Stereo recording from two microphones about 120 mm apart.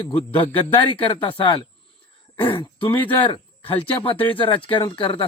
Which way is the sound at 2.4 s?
45° left (ahead or behind).